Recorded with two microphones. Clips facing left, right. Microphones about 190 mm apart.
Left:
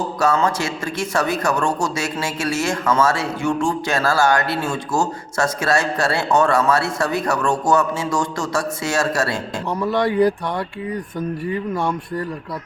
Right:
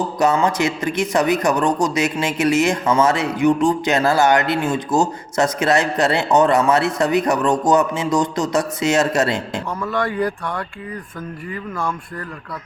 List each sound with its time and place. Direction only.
0.2 s a man's voice: 20° right (ahead or behind)
9.8 s speech: 30° left (ahead or behind)
11.5 s speech: 30° left (ahead or behind)